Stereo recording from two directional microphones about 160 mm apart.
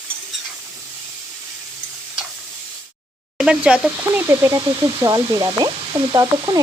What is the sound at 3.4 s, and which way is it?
Speech, 5° right (ahead or behind).